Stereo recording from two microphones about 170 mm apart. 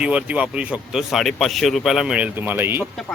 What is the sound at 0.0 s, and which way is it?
Speech, 5° right (ahead or behind).